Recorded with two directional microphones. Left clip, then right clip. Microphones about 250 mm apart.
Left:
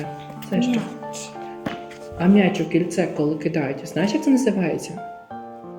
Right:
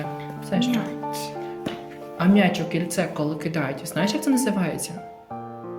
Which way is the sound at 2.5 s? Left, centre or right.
Right.